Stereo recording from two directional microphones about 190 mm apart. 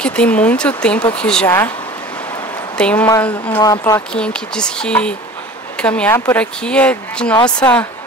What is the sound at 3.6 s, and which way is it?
Speech, 20° left (ahead or behind).